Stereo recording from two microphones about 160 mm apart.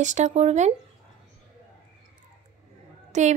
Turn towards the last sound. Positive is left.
turn(degrees=-50)  # may be behind; listen again after turning